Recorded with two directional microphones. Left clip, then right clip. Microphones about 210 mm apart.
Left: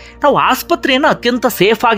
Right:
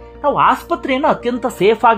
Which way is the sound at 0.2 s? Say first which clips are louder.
Left 2 dB; 20° left (ahead or behind).